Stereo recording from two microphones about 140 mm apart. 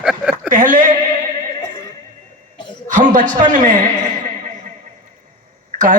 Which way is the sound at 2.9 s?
65° right (ahead or behind).